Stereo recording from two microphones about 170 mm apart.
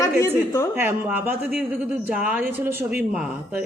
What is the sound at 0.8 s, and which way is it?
Speech, 10° right (ahead or behind).